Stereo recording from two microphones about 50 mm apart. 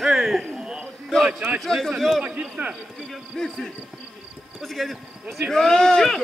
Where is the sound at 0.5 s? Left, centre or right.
Centre.